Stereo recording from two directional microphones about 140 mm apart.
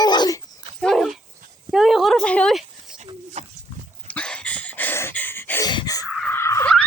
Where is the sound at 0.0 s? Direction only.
30° left (ahead or behind).